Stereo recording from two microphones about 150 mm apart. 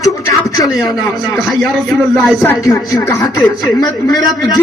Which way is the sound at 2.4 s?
20° left (ahead or behind).